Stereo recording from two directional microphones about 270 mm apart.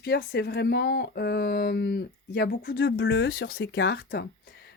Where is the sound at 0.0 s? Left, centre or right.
Left.